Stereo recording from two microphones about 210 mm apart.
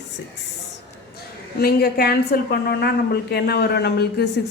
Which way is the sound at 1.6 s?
45° left (ahead or behind).